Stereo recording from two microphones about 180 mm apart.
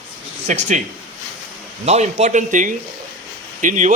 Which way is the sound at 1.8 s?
40° right (ahead or behind).